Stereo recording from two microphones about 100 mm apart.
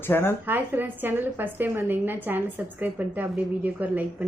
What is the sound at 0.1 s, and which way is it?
Speech, 25° left (ahead or behind).